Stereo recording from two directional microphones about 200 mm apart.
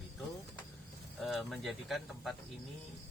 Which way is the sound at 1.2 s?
Centre (ahead or behind).